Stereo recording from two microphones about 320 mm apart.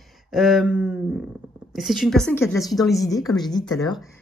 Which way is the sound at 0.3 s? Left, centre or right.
Centre.